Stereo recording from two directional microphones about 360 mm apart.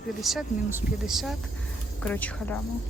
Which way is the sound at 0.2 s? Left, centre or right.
Centre.